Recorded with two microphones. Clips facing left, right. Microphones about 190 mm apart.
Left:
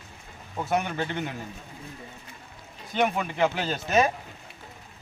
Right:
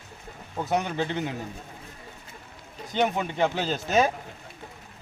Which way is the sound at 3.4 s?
Centre (ahead or behind).